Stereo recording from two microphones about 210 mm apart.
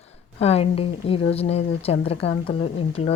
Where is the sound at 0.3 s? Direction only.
30° left (ahead or behind).